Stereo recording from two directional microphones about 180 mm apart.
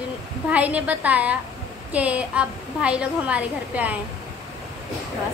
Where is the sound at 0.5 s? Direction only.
10° right (ahead or behind).